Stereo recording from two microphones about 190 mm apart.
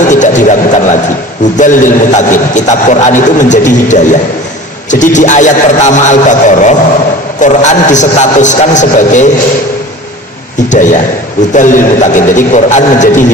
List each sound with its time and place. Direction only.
0.1 s a sound: 40° left (ahead or behind)
1.5 s a man's voice: 40° left (ahead or behind)
10.7 s a man's voice: 40° left (ahead or behind)